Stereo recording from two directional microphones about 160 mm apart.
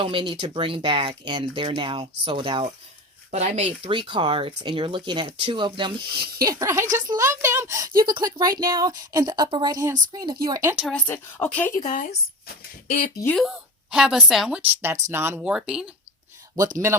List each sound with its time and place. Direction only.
0.0 s speech: 30° right (ahead or behind)
3.3 s speech: 40° right (ahead or behind)
6.4 s a woman's voice: 20° right (ahead or behind)
10.8 s a woman's voice: 10° left (ahead or behind)
11.8 s speech: 55° left (ahead or behind)
13.3 s a woman's voice: centre (ahead or behind)
14.6 s speech: 15° right (ahead or behind)
16.7 s speech: 15° right (ahead or behind)